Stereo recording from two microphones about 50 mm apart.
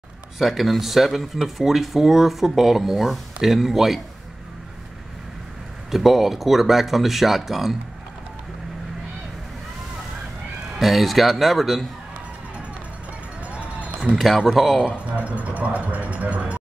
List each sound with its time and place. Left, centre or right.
0.4 s speech: centre
5.9 s speech: centre
10.8 s speech: centre
13.5 s run: right
14.1 s speech: centre
15.0 s speech: right